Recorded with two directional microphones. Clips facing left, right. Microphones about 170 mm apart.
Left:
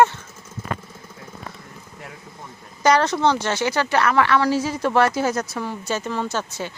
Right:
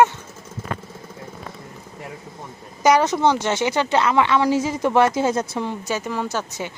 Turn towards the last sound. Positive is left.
turn(degrees=-15)  # may be behind; listen again after turning